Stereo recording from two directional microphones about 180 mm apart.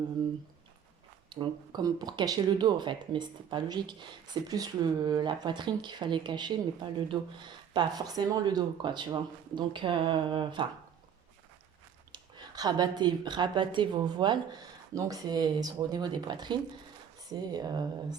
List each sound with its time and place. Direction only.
1.3 s speech: 25° right (ahead or behind)
12.1 s speech: 20° right (ahead or behind)